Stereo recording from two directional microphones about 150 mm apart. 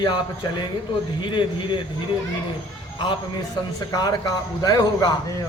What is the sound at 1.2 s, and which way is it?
Speech, 30° left (ahead or behind).